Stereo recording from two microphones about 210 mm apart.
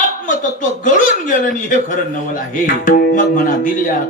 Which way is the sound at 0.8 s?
40° left (ahead or behind).